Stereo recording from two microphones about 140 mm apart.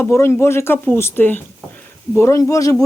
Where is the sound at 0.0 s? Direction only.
20° left (ahead or behind).